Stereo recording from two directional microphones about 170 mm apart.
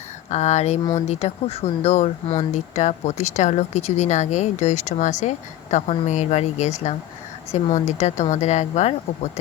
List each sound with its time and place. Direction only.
0.3 s speech: 40° left (ahead or behind)